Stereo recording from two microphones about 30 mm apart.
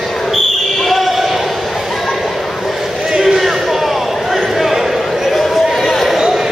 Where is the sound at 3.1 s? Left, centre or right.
Centre.